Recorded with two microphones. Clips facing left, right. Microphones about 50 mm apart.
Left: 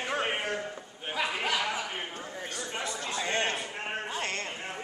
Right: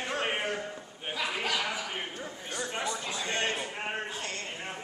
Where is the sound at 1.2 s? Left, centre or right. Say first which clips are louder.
Left 1 dB; centre.